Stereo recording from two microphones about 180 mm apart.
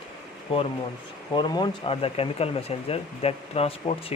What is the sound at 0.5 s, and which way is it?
Speech, 30° left (ahead or behind).